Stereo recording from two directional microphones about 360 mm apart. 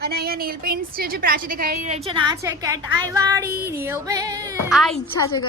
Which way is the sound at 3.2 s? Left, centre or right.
Centre.